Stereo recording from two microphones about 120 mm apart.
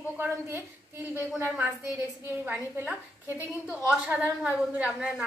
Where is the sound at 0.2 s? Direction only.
15° right (ahead or behind).